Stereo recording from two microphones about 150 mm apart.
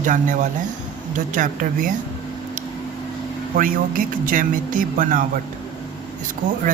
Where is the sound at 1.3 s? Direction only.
60° right (ahead or behind).